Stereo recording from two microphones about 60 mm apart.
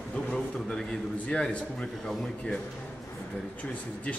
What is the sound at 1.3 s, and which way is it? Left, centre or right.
Speech, centre.